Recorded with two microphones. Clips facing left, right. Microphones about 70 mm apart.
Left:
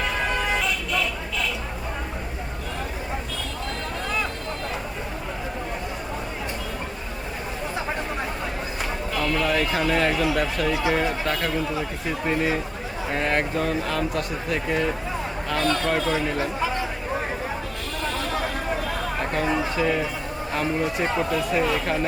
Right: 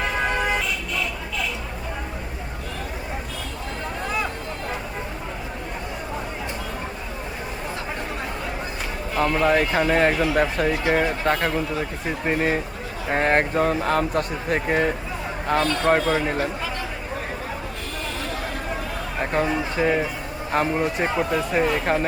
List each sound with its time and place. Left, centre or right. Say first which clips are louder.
9.1 s speech: right 4 dB; right
19.2 s a sound: right 5 dB; right
19.7 s a man's voice: right 2 dB; right
21.1 s speech: right 1 dB; centre
21.3 s speech: right 2 dB; right